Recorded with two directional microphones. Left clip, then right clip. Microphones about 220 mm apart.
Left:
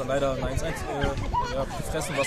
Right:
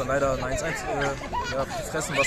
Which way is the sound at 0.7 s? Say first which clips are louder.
Right 2 dB; 50° right (ahead or behind).